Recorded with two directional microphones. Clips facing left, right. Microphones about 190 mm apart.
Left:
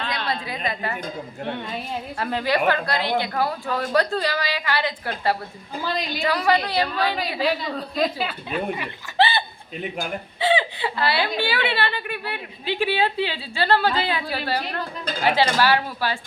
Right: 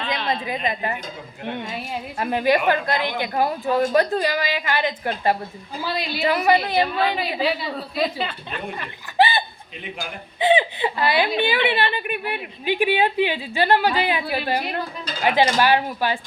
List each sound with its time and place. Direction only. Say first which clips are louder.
0.4 s a woman's voice: right 3 dB; 20° right (ahead or behind)
2.1 s speech: right 4 dB; 15° right (ahead or behind)
5.8 s speech: right 1 dB; 10° right (ahead or behind)
6.2 s a woman's voice: right 3 dB; 20° right (ahead or behind)
7.2 s a woman's voice: even; 5° right (ahead or behind); by 8.9 s 10° left (ahead or behind)
9.1 s a sound: right 2 dB; 15° right (ahead or behind)
10.4 s speech: right 3 dB; 20° right (ahead or behind)